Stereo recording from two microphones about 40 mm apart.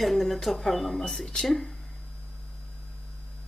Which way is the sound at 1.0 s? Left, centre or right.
Centre.